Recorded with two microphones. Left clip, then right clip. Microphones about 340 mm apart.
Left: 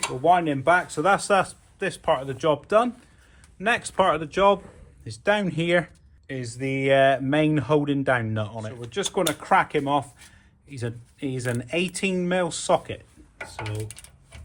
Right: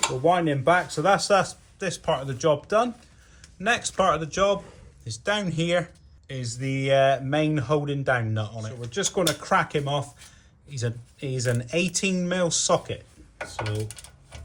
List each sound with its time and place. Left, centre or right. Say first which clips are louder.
0.3 s speech: left 2 dB; centre
13.6 s coin: right 3 dB; centre